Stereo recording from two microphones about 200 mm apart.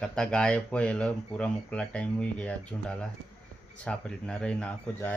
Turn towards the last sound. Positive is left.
turn(degrees=5)  # may be behind; listen again after turning